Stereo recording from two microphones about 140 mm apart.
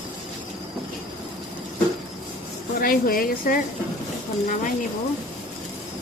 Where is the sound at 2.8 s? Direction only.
90° left.